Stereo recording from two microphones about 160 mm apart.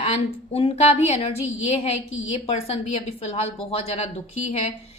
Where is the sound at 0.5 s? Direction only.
40° left (ahead or behind).